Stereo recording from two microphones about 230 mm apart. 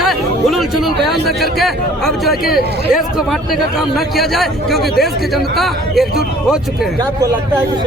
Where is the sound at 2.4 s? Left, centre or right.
Left.